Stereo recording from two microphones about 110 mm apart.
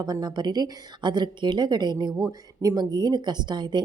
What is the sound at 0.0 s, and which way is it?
A woman's voice, 40° right (ahead or behind).